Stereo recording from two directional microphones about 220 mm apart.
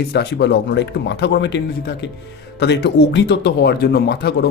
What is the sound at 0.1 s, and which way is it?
Speech, 50° left (ahead or behind).